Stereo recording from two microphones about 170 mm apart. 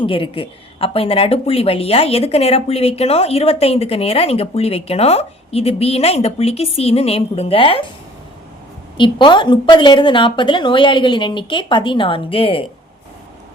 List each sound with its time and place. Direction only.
0.0 s a woman's voice: 30° left (ahead or behind)
9.0 s a woman's voice: 30° left (ahead or behind)